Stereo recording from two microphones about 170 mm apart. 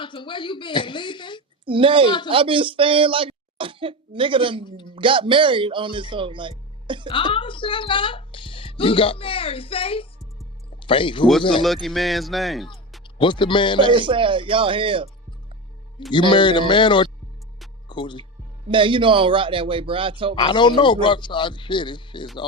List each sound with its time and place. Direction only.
0.0 s a man's voice: 30° left (ahead or behind)
1.6 s speech: 30° right (ahead or behind)
4.6 s a man's voice: 25° left (ahead or behind)
4.9 s speech: 30° right (ahead or behind)
7.1 s a woman's voice: 30° left (ahead or behind)
11.6 s speech: centre (ahead or behind)
13.1 s a man's voice: 30° left (ahead or behind)
13.9 s speech: 30° right (ahead or behind)
16.1 s a man's voice: 30° left (ahead or behind)
18.7 s speech: 30° right (ahead or behind)
20.3 s a man's voice: 25° left (ahead or behind)